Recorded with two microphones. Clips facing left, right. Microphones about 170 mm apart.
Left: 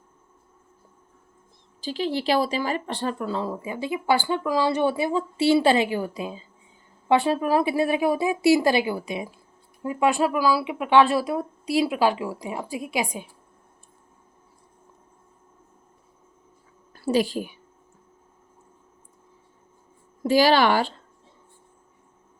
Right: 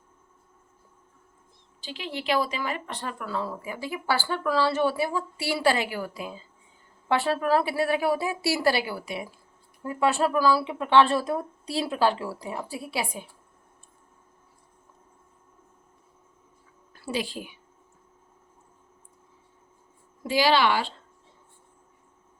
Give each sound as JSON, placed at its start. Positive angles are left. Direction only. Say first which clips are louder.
{"t": 1.8, "sound": "speech", "louder": "left 9 dB", "side_deg": 35}
{"t": 16.9, "sound": "a woman's voice", "louder": "left 8 dB", "side_deg": 40}
{"t": 20.2, "sound": "a woman's voice", "louder": "left 4 dB", "side_deg": 45}